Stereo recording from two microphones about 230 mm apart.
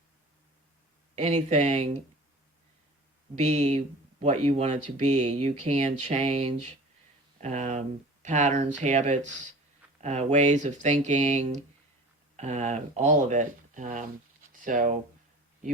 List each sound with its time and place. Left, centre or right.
1.1 s speech: right
3.3 s speech: right